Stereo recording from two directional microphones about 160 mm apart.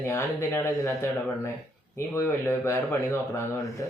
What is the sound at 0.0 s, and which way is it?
Speech, 15° left (ahead or behind).